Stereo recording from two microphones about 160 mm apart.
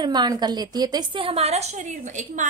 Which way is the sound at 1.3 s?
40° right (ahead or behind).